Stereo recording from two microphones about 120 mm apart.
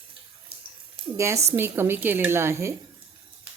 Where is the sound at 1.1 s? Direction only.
25° right (ahead or behind).